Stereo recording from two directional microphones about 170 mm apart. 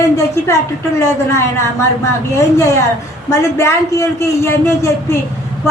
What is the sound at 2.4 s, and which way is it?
A man's voice, 15° left (ahead or behind).